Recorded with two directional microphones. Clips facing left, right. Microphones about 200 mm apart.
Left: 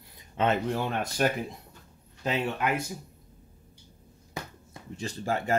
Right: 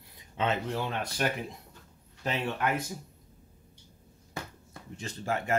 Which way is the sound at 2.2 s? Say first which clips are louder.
Left 2 dB; 15° left (ahead or behind).